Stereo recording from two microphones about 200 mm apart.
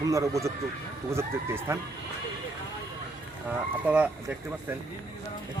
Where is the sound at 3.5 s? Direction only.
5° right (ahead or behind).